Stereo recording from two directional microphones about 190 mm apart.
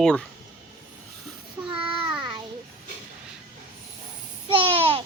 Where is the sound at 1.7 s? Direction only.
25° right (ahead or behind).